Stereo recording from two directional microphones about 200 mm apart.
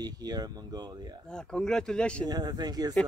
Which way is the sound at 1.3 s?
5° left (ahead or behind).